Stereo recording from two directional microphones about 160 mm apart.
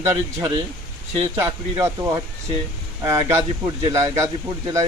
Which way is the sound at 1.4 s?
20° right (ahead or behind).